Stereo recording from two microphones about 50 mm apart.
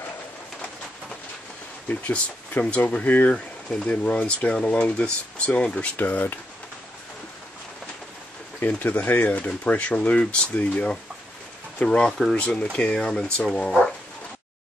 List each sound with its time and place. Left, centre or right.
1.9 s speech: left
5.9 s speech: left
8.6 s speech: left; by 12.4 s centre
12.4 s speech: left